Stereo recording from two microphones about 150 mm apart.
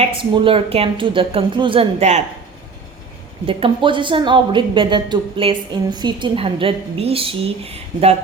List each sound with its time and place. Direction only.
0.0 s a woman's voice: 35° right (ahead or behind)
3.4 s a woman's voice: 35° right (ahead or behind)